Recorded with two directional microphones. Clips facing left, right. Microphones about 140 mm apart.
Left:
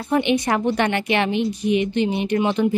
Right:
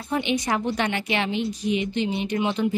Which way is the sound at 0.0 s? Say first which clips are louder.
Left 6 dB; 60° left (ahead or behind).